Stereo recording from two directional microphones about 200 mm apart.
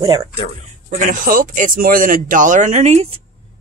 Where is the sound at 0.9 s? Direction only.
40° right (ahead or behind).